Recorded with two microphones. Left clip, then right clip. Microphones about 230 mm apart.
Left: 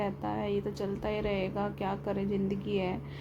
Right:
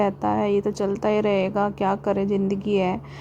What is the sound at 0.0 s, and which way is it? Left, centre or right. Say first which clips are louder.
A woman's voice: right 12 dB; right.